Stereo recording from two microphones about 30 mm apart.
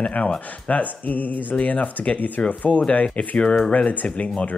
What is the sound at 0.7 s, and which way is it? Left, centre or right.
Speech, left.